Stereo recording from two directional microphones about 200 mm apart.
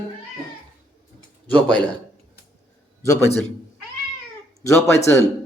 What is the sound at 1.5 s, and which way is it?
Speech, 5° left (ahead or behind).